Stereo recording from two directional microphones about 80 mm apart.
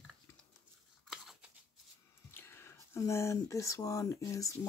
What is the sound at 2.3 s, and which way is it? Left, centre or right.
Speech, left.